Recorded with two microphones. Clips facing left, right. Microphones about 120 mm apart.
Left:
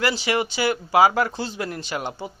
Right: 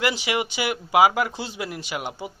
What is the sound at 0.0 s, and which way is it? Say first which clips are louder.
Speech: left 2 dB; 15° right (ahead or behind).